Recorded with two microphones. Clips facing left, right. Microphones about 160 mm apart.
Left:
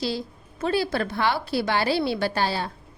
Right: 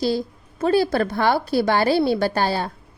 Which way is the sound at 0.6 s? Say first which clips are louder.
Right 6 dB; 45° right (ahead or behind).